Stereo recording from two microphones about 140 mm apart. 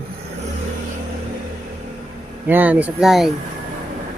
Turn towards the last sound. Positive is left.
turn(degrees=0)  # may be behind; listen again after turning